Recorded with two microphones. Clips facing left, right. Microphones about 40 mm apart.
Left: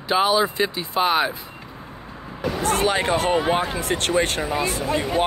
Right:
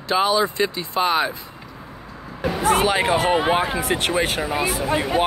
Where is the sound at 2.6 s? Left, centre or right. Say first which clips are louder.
Right 3 dB; centre.